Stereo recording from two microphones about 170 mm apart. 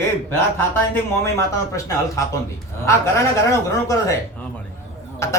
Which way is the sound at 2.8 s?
15° left (ahead or behind).